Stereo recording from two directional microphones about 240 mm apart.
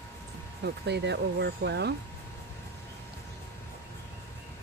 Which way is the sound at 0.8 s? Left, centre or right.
Right.